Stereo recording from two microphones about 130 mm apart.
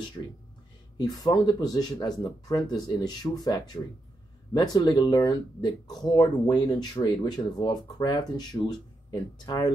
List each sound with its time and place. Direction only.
0.2 s speech: 35° left (ahead or behind)